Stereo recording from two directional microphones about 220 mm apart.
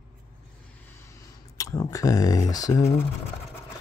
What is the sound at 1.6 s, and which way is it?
Speech, 15° left (ahead or behind).